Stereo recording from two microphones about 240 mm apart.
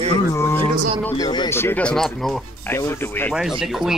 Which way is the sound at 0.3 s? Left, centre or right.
Centre.